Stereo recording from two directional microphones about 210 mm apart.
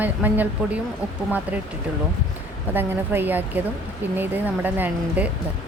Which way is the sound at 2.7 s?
10° right (ahead or behind).